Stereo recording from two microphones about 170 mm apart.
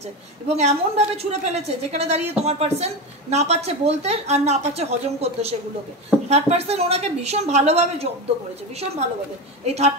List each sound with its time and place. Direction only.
0.5 s a woman's voice: 40° right (ahead or behind)
9.7 s a woman's voice: 40° right (ahead or behind)